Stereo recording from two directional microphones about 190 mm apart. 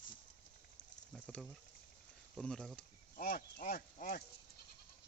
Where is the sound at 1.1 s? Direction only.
5° left (ahead or behind).